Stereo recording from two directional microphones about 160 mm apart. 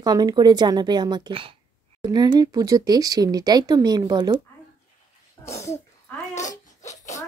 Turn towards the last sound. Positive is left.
turn(degrees=45)  # may be behind; listen again after turning